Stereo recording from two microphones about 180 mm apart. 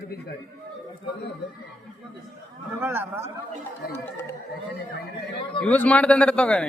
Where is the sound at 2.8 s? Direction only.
10° right (ahead or behind).